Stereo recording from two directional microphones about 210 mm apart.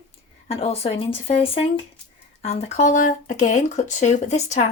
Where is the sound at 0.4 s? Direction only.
30° left (ahead or behind).